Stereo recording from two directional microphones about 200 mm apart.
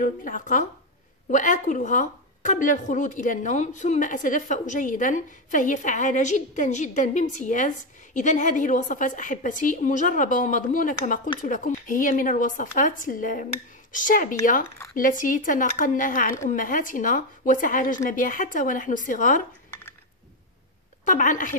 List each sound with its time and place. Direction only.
0.0 s speech: 40° left (ahead or behind)
21.0 s a woman's voice: 40° left (ahead or behind)